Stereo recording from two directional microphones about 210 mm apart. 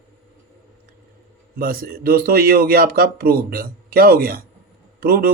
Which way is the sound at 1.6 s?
45° right (ahead or behind).